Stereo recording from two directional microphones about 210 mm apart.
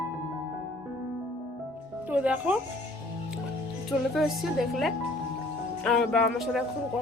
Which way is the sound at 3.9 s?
Centre (ahead or behind).